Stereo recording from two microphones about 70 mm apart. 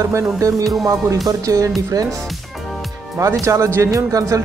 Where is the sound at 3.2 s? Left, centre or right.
Right.